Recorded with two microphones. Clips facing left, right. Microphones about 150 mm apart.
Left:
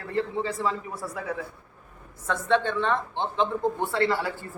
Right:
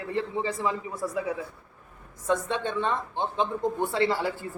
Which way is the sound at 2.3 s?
15° right (ahead or behind).